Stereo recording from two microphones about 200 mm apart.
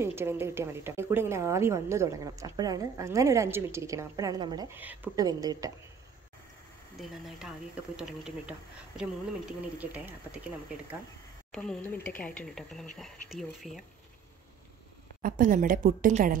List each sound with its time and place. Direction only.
0.0 s a woman's voice: 10° right (ahead or behind)
7.0 s a woman's voice: centre (ahead or behind)
11.5 s speech: 5° left (ahead or behind)
15.2 s speech: 45° right (ahead or behind)